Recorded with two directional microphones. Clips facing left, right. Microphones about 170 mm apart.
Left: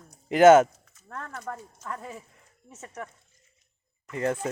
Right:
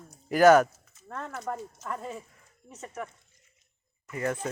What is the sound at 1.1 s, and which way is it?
Speech, 25° right (ahead or behind).